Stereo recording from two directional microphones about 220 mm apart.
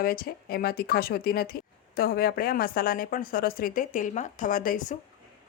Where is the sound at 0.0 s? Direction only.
40° left (ahead or behind).